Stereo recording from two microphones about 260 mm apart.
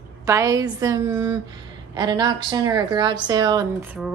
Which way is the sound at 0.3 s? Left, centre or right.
Centre.